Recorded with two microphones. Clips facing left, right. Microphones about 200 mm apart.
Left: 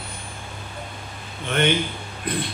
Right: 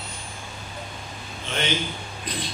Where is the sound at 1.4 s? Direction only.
60° left (ahead or behind).